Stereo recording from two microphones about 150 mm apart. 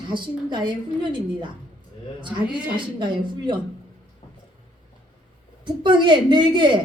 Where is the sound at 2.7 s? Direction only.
30° right (ahead or behind).